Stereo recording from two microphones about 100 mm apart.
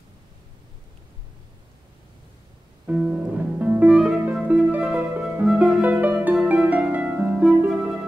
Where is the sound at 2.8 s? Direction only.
10° right (ahead or behind).